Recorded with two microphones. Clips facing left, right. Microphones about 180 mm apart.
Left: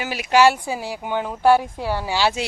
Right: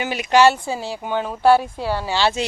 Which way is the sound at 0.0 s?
5° left (ahead or behind).